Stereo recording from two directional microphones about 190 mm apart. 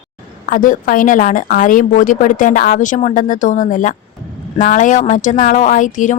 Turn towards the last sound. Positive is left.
turn(degrees=40)  # may be behind; listen again after turning